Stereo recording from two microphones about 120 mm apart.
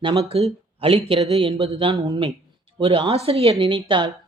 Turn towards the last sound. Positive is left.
turn(degrees=-45)  # may be behind; listen again after turning